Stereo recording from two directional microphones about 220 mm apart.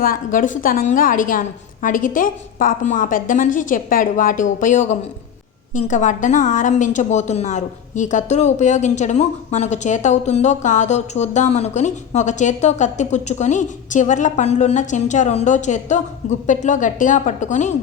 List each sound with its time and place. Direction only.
0.0 s a woman's voice: 40° left (ahead or behind)